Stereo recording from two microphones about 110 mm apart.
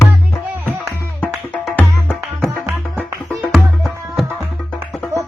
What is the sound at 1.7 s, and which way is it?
Music, 15° left (ahead or behind).